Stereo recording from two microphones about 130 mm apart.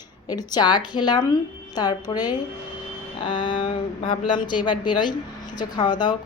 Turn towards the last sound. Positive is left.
turn(degrees=35)  # may be behind; listen again after turning